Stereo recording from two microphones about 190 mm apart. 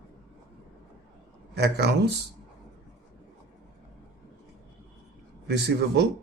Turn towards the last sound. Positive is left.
turn(degrees=-60)  # may be behind; listen again after turning